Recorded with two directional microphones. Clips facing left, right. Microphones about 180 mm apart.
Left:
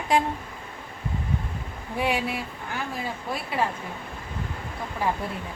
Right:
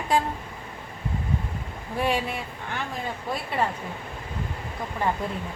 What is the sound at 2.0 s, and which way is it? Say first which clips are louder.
Speech: even; 10° left (ahead or behind).